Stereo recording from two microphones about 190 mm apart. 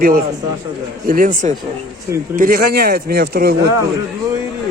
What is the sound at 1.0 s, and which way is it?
A man's voice, 45° right (ahead or behind).